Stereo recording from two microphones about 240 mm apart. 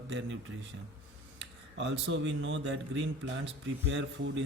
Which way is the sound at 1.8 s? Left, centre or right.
Right.